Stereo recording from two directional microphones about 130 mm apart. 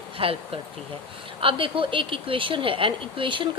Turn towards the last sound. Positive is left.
turn(degrees=-40)  # may be behind; listen again after turning